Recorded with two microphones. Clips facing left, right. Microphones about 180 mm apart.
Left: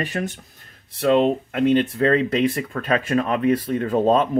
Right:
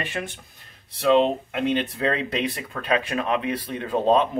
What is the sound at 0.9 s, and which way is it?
Speech, 50° left (ahead or behind).